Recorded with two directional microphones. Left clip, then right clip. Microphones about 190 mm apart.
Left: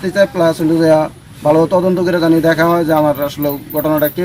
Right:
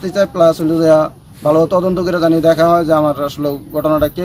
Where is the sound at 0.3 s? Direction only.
20° right (ahead or behind).